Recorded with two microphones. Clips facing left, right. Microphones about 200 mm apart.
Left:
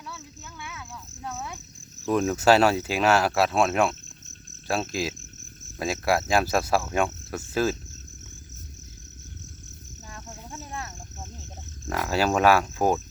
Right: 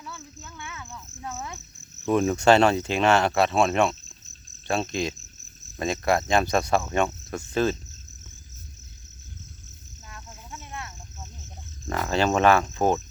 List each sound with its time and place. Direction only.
0.6 s a sound: 5° left (ahead or behind)
2.0 s cricket: centre (ahead or behind)
10.1 s cricket: 30° left (ahead or behind)
11.9 s speech: 5° left (ahead or behind)